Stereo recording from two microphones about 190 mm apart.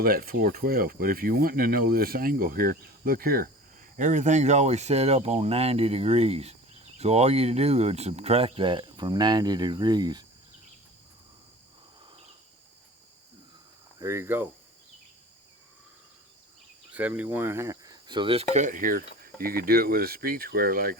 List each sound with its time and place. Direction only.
0.0 s speech: 50° right (ahead or behind); by 10.2 s 20° right (ahead or behind)
14.0 s speech: 15° right (ahead or behind)
16.9 s speech: 10° right (ahead or behind); by 18.4 s 25° right (ahead or behind)
18.5 s speech: 40° right (ahead or behind)